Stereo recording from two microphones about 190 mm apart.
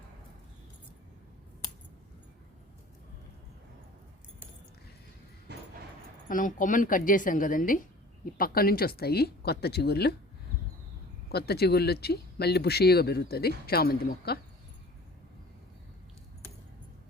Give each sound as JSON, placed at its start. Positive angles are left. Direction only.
{"t": 5.5, "sound": "a sound", "side_deg": -60}
{"t": 6.2, "sound": "a woman's voice", "side_deg": 45}
{"t": 11.3, "sound": "a woman's voice", "side_deg": 55}